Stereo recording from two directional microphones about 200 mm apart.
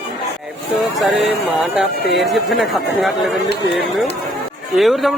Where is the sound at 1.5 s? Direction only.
Centre (ahead or behind).